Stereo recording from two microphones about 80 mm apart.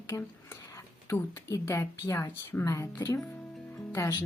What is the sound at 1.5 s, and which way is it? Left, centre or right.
A woman's voice, left.